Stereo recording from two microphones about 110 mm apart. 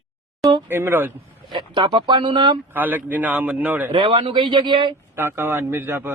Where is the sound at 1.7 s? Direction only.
45° right (ahead or behind).